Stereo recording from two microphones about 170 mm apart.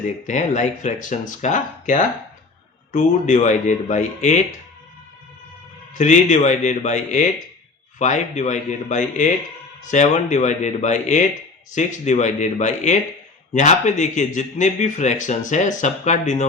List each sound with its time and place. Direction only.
0.3 s speech: 45° left (ahead or behind)
5.9 s speech: 45° left (ahead or behind)